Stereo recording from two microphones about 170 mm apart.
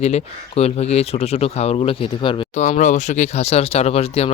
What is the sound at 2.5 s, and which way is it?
Speech, 45° left (ahead or behind).